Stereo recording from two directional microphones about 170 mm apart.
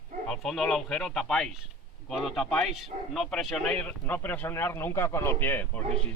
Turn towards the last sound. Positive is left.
turn(degrees=10)  # may be behind; listen again after turning